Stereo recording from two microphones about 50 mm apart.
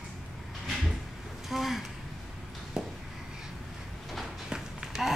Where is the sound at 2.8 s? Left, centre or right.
Centre.